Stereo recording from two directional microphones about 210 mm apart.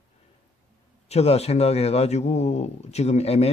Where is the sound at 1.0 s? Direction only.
30° left (ahead or behind).